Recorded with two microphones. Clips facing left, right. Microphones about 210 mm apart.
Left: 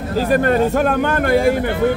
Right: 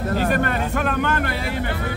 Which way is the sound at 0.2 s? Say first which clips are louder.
Left 10 dB; 35° left (ahead or behind).